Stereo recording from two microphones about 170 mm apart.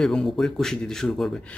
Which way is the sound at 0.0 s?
5° left (ahead or behind).